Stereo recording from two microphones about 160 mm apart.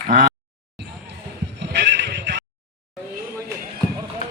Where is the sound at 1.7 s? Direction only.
90° right.